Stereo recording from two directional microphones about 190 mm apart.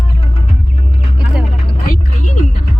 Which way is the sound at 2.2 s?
45° left (ahead or behind).